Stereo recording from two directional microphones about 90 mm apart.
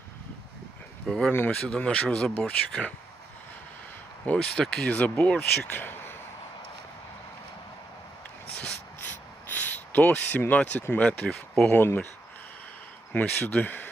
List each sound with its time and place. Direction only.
1.0 s speech: centre (ahead or behind)
1.3 s speech: 25° left (ahead or behind)
1.6 s speech: 10° left (ahead or behind)
4.3 s speech: 15° left (ahead or behind)
8.5 s a sound: 20° left (ahead or behind)
11.7 s speech: 25° left (ahead or behind)
13.1 s speech: 20° left (ahead or behind)